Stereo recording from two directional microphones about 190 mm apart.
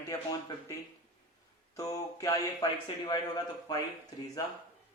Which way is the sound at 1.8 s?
20° left (ahead or behind).